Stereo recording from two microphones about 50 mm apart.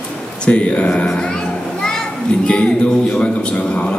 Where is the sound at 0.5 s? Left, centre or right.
Left.